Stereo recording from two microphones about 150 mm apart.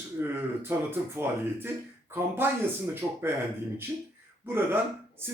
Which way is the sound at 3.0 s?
15° right (ahead or behind).